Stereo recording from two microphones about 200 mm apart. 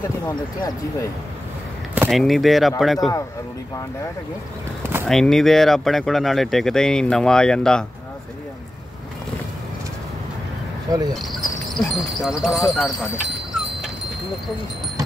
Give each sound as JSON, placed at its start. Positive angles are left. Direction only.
{"t": 2.0, "sound": "speech", "side_deg": 0}
{"t": 5.0, "sound": "speech", "side_deg": 0}
{"t": 10.9, "sound": "speech", "side_deg": -20}
{"t": 11.8, "sound": "speech", "side_deg": 0}